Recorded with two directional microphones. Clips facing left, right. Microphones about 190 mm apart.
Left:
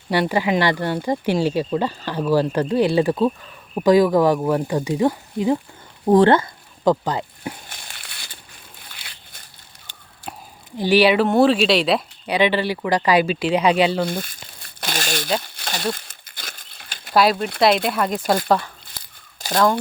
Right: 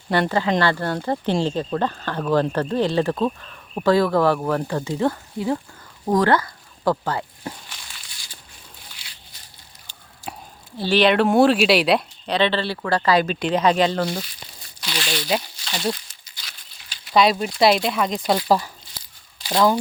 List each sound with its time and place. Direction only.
0.1 s speech: 10° left (ahead or behind)
6.1 s speech: 25° left (ahead or behind)
7.7 s a sound: 55° left (ahead or behind)
8.8 s crushing: 55° left (ahead or behind)
10.2 s a sound: 60° left (ahead or behind)
10.8 s speech: 15° left (ahead or behind)
12.3 s speech: 10° left (ahead or behind)
14.1 s speech: 50° left (ahead or behind)
15.4 s crumpling: 55° left (ahead or behind)
17.8 s speech: 5° left (ahead or behind)
18.4 s speech: 5° right (ahead or behind)
18.9 s a sound: 50° left (ahead or behind)